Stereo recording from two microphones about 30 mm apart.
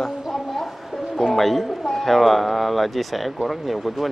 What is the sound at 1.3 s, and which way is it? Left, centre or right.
Speech, centre.